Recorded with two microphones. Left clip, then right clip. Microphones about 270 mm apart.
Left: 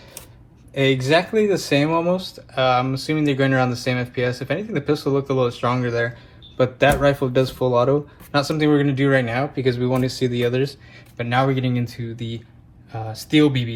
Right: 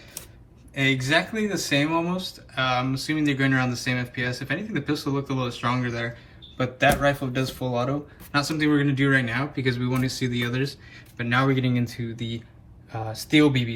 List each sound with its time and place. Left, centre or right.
0.7 s speech: centre